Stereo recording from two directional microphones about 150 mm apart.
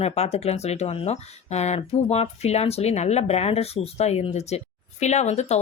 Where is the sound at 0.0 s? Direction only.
45° left (ahead or behind).